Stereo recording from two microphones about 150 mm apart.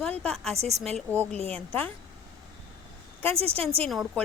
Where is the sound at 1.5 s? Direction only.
10° left (ahead or behind).